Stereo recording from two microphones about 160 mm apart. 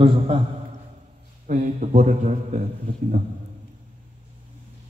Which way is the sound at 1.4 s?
50° right (ahead or behind).